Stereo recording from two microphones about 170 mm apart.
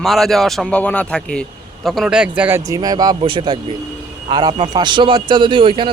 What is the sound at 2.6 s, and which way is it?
Speech, 20° right (ahead or behind).